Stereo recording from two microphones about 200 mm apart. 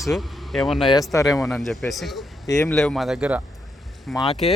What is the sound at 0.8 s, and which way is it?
Speech, 25° left (ahead or behind).